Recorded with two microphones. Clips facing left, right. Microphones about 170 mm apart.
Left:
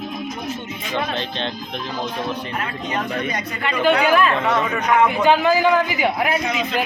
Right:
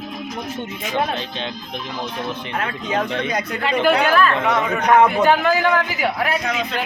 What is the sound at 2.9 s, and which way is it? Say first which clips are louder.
Speech: right 3 dB; 90° right.